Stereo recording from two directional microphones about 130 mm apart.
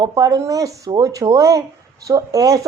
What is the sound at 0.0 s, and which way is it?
Speech, 30° right (ahead or behind).